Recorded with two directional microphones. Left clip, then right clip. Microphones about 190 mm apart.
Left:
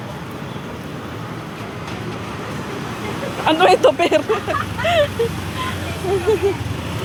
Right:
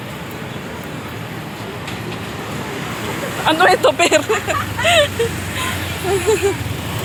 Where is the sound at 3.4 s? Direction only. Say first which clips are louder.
Even; 30° left (ahead or behind).